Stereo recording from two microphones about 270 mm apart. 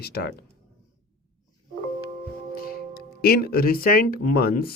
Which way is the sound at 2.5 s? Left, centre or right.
Left.